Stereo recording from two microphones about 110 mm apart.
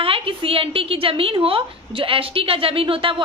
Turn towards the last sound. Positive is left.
turn(degrees=-55)  # may be behind; listen again after turning